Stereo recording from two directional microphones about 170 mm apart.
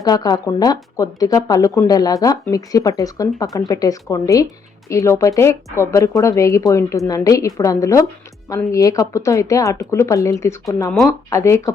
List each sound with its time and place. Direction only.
0.0 s speech: 25° left (ahead or behind)